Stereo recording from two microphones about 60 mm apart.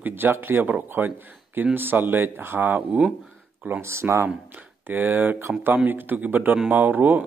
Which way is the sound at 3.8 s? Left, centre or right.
Right.